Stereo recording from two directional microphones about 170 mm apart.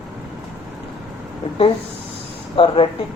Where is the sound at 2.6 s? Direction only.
30° left (ahead or behind).